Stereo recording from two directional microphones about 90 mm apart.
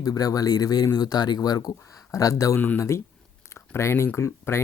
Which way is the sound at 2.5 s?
20° left (ahead or behind).